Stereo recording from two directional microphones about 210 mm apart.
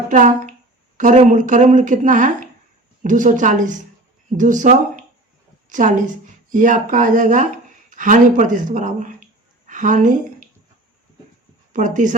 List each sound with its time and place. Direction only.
0.1 s a woman's voice: 35° right (ahead or behind)
11.7 s speech: 35° right (ahead or behind)